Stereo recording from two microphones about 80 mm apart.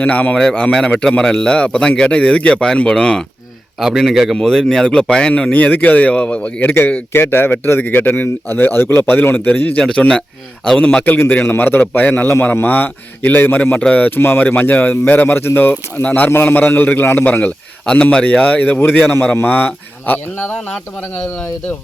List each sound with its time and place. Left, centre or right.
0.0 s a man's voice: centre
3.8 s a man's voice: centre